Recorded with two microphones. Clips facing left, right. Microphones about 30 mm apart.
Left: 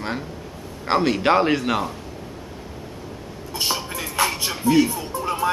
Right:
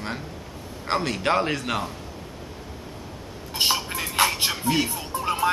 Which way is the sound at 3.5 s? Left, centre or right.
Right.